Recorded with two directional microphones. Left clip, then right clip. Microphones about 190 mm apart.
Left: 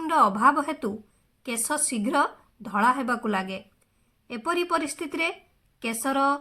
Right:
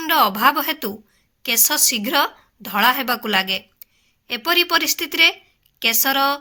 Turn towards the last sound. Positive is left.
turn(degrees=-15)  # may be behind; listen again after turning